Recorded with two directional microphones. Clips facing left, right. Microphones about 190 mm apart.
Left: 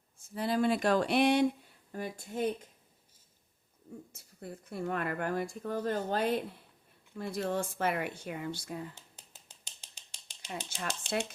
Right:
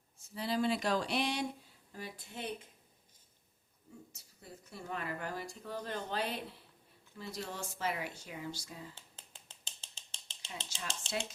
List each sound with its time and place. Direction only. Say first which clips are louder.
0.3 s speech: left 4 dB; 50° left (ahead or behind)
4.1 s speech: left 8 dB; 55° left (ahead or behind)
9.1 s a sound: even; 15° left (ahead or behind)
10.7 s speech: left 5 dB; 55° left (ahead or behind)